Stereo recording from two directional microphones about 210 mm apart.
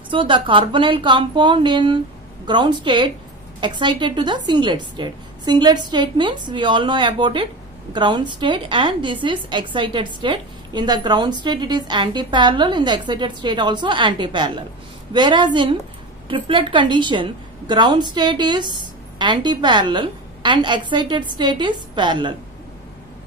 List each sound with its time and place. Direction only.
0.1 s a woman's voice: 25° right (ahead or behind)